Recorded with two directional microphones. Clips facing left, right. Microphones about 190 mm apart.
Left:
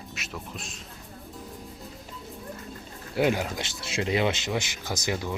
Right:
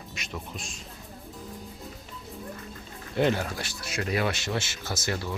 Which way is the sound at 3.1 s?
10° left (ahead or behind).